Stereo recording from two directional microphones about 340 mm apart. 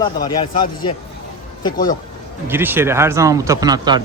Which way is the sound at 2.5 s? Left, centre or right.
Centre.